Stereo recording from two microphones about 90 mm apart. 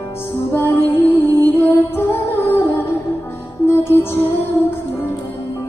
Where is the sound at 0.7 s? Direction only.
25° left (ahead or behind).